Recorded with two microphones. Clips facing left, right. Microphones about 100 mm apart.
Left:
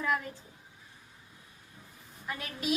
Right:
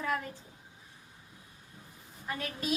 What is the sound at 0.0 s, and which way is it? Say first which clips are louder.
Speech: left 2 dB; 40° right (ahead or behind).